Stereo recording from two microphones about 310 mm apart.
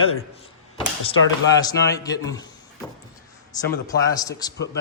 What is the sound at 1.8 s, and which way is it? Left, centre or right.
Speech, left.